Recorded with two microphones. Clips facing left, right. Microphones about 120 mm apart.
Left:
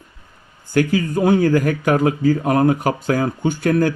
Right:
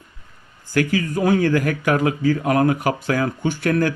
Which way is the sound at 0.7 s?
25° left (ahead or behind).